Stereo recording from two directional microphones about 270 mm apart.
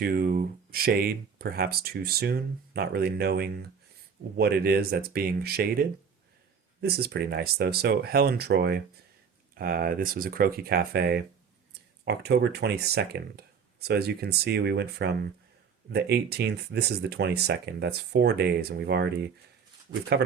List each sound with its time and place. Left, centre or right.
0.0 s speech: right
6.8 s speech: right